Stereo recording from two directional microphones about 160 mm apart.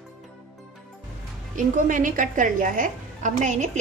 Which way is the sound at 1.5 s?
55° right (ahead or behind).